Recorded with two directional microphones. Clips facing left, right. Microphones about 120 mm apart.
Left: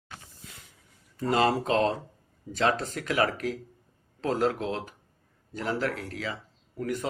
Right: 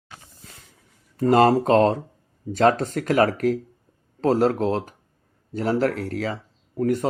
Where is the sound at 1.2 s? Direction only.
45° right (ahead or behind).